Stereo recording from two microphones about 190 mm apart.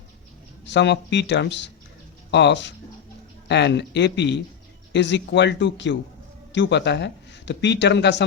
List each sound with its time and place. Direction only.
0.7 s speech: 65° left (ahead or behind)